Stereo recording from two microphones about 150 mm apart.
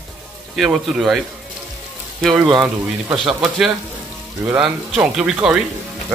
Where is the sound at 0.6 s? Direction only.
Centre (ahead or behind).